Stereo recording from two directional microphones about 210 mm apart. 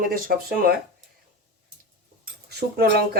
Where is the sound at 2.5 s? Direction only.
50° right (ahead or behind).